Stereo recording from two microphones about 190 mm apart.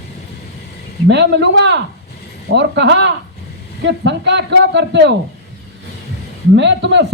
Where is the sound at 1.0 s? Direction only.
65° right (ahead or behind).